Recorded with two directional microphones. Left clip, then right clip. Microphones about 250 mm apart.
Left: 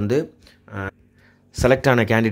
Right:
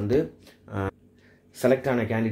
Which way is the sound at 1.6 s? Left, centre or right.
Left.